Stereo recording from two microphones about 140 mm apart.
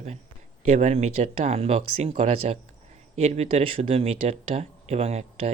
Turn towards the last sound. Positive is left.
turn(degrees=-50)  # may be behind; listen again after turning